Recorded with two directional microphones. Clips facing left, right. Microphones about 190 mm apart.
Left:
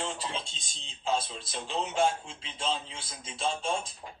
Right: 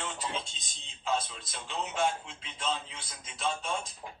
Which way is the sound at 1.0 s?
30° left (ahead or behind).